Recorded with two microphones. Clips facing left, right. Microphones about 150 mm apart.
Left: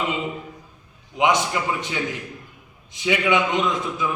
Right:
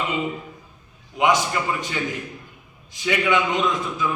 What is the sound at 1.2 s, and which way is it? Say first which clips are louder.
Speech: even; 20° left (ahead or behind).